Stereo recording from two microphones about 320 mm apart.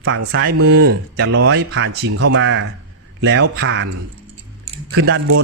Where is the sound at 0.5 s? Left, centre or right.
Right.